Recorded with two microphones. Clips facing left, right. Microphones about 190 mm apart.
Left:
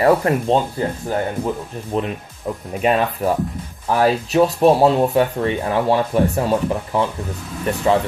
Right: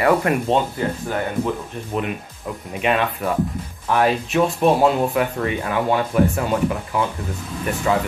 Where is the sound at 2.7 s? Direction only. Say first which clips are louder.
Left 2 dB; 40° left (ahead or behind).